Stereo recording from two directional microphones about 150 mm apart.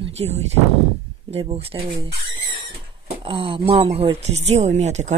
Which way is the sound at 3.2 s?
35° right (ahead or behind).